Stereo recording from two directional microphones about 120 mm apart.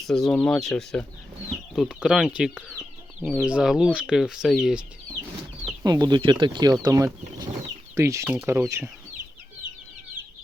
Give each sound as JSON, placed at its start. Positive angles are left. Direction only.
{"t": 0.1, "sound": "speech", "side_deg": 5}
{"t": 5.8, "sound": "speech", "side_deg": -35}